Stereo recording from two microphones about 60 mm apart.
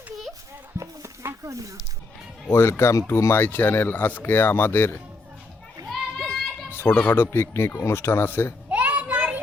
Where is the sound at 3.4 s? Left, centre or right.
Left.